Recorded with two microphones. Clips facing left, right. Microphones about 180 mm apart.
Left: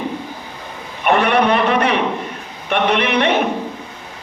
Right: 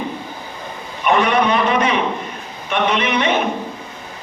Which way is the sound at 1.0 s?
60° left (ahead or behind).